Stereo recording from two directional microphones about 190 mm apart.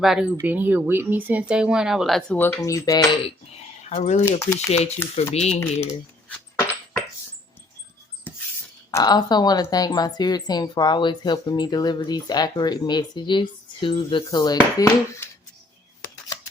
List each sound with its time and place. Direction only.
0.0 s speech: 5° right (ahead or behind); by 3.2 s 20° left (ahead or behind)
3.2 s speech: 30° left (ahead or behind)
4.3 s speech: 15° left (ahead or behind)
5.3 s speech: 35° left (ahead or behind)
5.9 s dog: 10° left (ahead or behind)
8.3 s a sound: 10° left (ahead or behind)
8.9 s a woman's voice: 20° left (ahead or behind)